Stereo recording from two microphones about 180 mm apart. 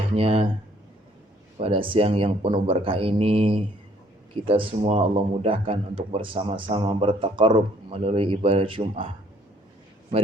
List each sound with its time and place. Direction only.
0.2 s speech: 30° right (ahead or behind)
1.5 s a man's voice: 30° right (ahead or behind)